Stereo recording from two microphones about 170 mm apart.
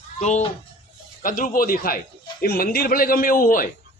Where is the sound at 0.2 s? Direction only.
40° left (ahead or behind).